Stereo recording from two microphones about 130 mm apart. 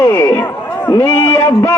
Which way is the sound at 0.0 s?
20° left (ahead or behind).